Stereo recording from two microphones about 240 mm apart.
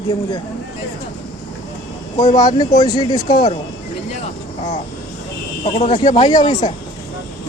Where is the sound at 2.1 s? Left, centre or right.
Centre.